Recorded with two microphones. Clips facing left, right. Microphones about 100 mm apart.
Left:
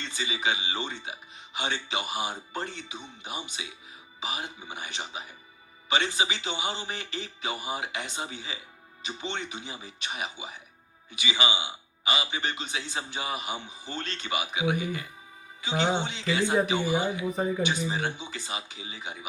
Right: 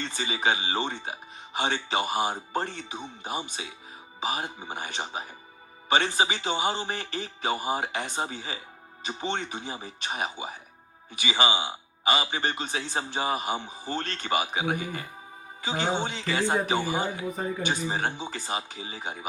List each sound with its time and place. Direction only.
0.0 s a man's voice: 45° right (ahead or behind)